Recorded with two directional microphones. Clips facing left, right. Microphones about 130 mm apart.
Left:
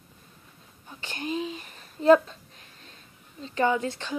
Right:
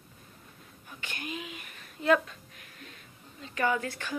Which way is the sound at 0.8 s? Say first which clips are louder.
Left 6 dB; 30° left (ahead or behind).